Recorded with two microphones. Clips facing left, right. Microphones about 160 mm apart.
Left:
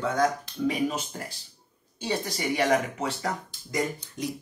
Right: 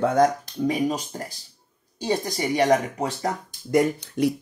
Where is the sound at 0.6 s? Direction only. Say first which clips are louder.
Right 3 dB; 40° right (ahead or behind).